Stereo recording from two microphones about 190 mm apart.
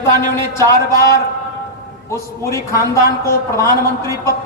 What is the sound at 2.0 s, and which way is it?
A man's voice, 15° left (ahead or behind).